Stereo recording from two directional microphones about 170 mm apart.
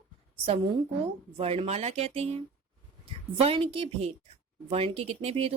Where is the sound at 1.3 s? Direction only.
35° right (ahead or behind).